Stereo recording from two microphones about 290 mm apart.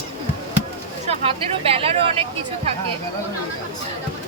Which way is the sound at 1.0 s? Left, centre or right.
Right.